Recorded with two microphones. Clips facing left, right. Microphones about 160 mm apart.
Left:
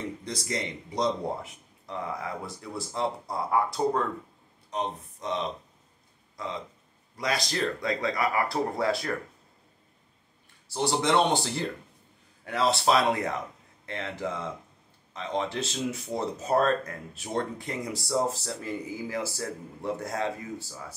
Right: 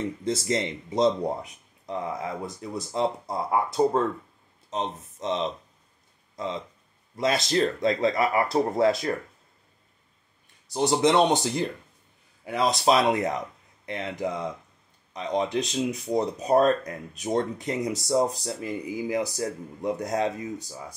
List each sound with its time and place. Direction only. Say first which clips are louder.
0.2 s speech: right 7 dB; 25° right (ahead or behind)
10.7 s speech: right 4 dB; 20° right (ahead or behind)